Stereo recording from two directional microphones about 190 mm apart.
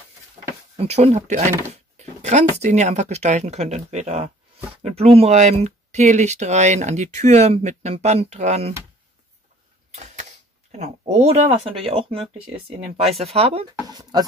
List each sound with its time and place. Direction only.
0.7 s speech: 35° right (ahead or behind)
9.8 s a sound: 35° right (ahead or behind)
10.7 s speech: 35° right (ahead or behind)
13.8 s speech: 20° right (ahead or behind)